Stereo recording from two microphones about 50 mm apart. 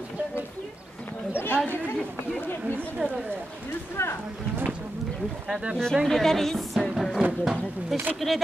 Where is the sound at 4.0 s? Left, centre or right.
Left.